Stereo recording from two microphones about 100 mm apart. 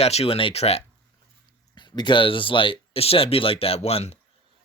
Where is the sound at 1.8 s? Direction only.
50° left (ahead or behind); by 4.2 s 90° left.